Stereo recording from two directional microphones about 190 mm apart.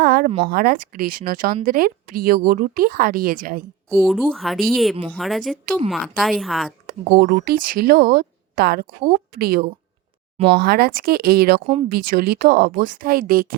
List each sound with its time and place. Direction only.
0.0 s a sound: 50° right (ahead or behind)
0.3 s speech: 30° right (ahead or behind)
0.5 s speech: 50° right (ahead or behind)
4.0 s a woman's voice: centre (ahead or behind)
6.8 s speech: 45° right (ahead or behind)
10.3 s speech: 30° right (ahead or behind)
10.6 s speech: 55° right (ahead or behind)